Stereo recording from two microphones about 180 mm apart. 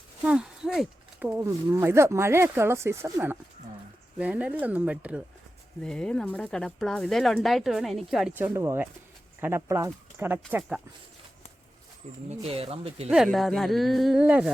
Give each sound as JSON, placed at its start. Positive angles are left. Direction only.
{"t": 0.2, "sound": "speech", "side_deg": -5}
{"t": 5.8, "sound": "speech", "side_deg": 5}
{"t": 12.3, "sound": "speech", "side_deg": -35}
{"t": 13.1, "sound": "speech", "side_deg": 0}